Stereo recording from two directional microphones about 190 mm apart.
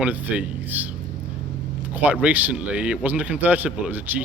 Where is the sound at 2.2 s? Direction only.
10° right (ahead or behind).